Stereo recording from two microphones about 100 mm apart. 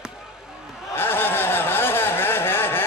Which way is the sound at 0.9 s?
20° left (ahead or behind).